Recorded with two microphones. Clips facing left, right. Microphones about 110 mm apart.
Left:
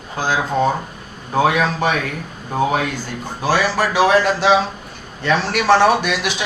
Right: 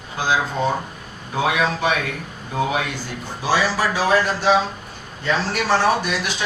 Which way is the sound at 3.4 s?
55° left (ahead or behind).